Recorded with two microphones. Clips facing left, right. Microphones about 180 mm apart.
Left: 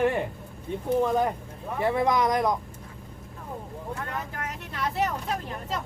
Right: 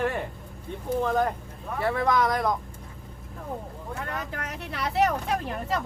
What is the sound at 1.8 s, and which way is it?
Speech, 15° left (ahead or behind).